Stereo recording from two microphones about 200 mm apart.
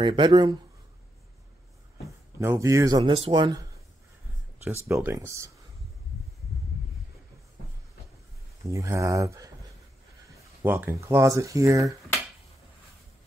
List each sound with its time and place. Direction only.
0.0 s speech: 20° right (ahead or behind)
2.0 s speech: 15° right (ahead or behind)
4.8 s speech: 15° right (ahead or behind)
8.7 s speech: 15° right (ahead or behind)
10.6 s speech: 10° right (ahead or behind)